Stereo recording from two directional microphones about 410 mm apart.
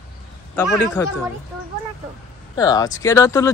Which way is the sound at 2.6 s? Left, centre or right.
Centre.